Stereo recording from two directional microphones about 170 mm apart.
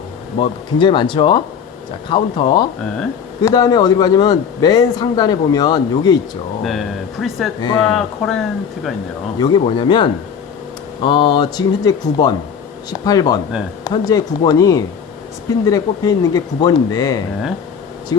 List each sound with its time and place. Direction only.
0.3 s a man's voice: 30° left (ahead or behind)
6.7 s speech: centre (ahead or behind)
9.4 s a man's voice: 25° left (ahead or behind)